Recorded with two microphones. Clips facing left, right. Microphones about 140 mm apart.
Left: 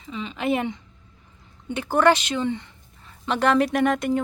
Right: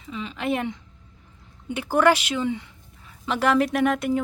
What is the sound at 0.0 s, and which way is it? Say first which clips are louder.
A woman's voice: left 2 dB; centre (ahead or behind).